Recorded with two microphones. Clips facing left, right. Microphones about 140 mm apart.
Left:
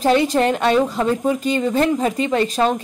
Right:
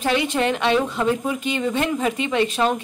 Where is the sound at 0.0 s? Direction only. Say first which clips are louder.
Left 5 dB; 40° left (ahead or behind).